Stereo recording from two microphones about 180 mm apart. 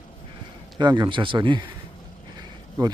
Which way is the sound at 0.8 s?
25° right (ahead or behind).